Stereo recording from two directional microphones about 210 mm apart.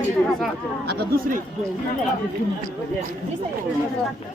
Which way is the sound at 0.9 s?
50° right (ahead or behind).